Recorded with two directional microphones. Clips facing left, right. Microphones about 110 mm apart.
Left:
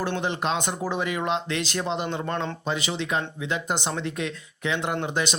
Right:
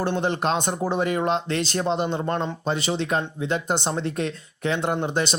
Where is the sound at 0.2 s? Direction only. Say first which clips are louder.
Right 3 dB; 40° right (ahead or behind).